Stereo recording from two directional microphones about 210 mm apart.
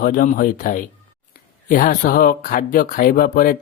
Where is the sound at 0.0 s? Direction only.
40° left (ahead or behind).